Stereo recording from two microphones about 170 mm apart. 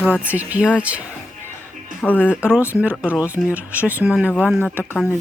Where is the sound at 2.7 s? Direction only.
10° right (ahead or behind).